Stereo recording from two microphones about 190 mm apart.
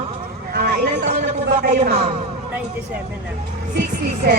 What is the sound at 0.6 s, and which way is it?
A man's voice, 50° right (ahead or behind).